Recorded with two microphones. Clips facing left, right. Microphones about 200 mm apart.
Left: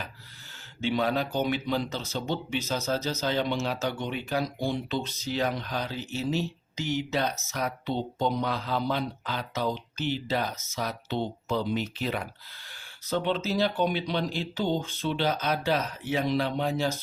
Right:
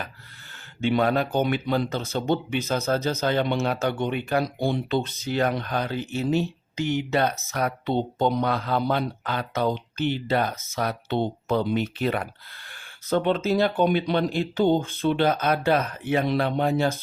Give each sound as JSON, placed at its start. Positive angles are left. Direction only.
{"t": 0.8, "sound": "speech", "side_deg": -55}